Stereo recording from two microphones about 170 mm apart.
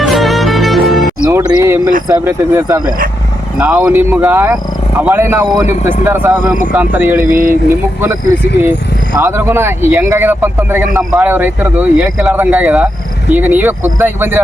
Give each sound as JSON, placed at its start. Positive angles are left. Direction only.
{"t": 0.0, "sound": "music", "side_deg": 0}
{"t": 1.3, "sound": "music", "side_deg": -15}
{"t": 2.0, "sound": "speech", "side_deg": -15}
{"t": 5.6, "sound": "speech", "side_deg": 45}
{"t": 6.1, "sound": "speech", "side_deg": -10}
{"t": 9.1, "sound": "speech", "side_deg": -15}